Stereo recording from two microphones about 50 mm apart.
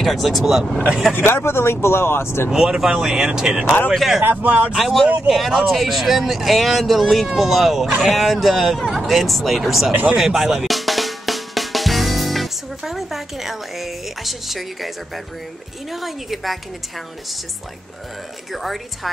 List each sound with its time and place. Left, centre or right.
0.0 s speech: centre
0.7 s speech: centre
1.1 s speech: left
2.5 s speech: centre
4.2 s speech: right
4.7 s speech: centre
10.1 s drum: centre
15.9 s speech: centre
18.5 s speech: centre